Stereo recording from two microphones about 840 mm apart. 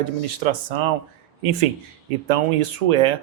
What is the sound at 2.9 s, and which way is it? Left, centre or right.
Speech, right.